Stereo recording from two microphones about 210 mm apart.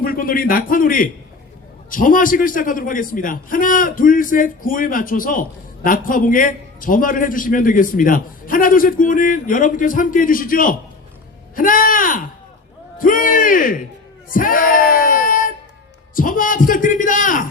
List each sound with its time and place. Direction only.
0.0 s a man's voice: 45° left (ahead or behind)